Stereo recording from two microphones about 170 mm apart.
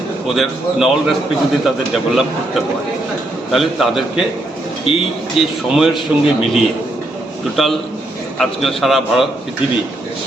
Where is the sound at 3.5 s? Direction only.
Centre (ahead or behind).